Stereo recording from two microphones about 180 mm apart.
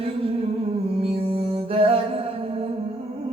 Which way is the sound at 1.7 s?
30° right (ahead or behind).